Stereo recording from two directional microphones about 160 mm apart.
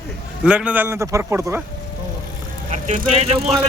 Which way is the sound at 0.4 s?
5° right (ahead or behind).